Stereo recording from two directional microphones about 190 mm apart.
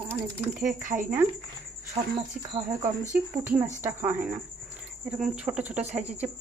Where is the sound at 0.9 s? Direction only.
30° right (ahead or behind).